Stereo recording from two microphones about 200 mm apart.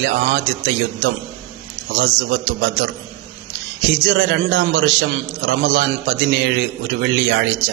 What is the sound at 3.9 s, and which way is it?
A man's voice, 65° right (ahead or behind).